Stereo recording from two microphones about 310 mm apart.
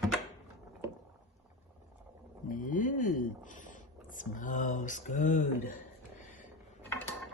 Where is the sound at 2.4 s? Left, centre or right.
Left.